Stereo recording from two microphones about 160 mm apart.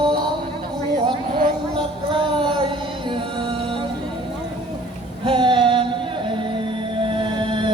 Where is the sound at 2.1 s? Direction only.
30° right (ahead or behind).